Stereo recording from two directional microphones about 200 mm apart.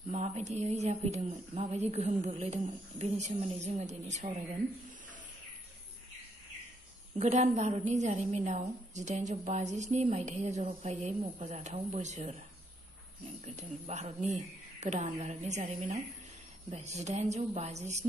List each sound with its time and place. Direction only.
0.1 s a woman's voice: 35° right (ahead or behind)
7.2 s a woman's voice: 35° right (ahead or behind)
13.6 s a woman's voice: 35° right (ahead or behind)